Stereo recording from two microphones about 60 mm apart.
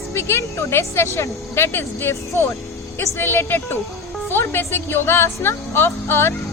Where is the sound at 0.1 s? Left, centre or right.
Left.